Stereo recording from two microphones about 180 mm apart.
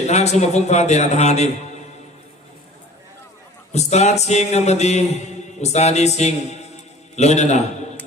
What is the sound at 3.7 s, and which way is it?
Speech, 40° left (ahead or behind).